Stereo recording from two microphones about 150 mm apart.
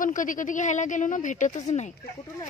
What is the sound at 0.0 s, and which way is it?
A woman's voice, 60° left (ahead or behind).